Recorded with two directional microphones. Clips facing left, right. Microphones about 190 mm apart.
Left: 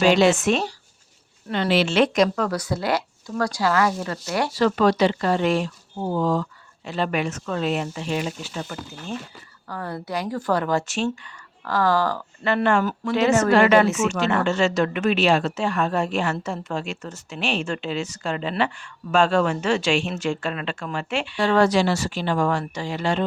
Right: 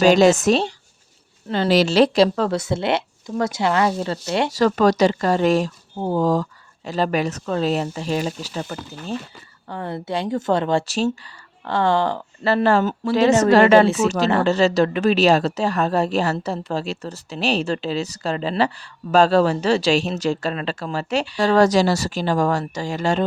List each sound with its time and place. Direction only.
0.0 s speech: 40° right (ahead or behind); by 4.5 s 20° right (ahead or behind)
4.5 s speech: 40° right (ahead or behind)
9.6 s speech: 25° right (ahead or behind)
11.6 s speech: 25° right (ahead or behind); by 23.2 s 40° right (ahead or behind)